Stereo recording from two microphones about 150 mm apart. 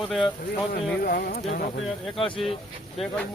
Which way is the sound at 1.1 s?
75° left (ahead or behind).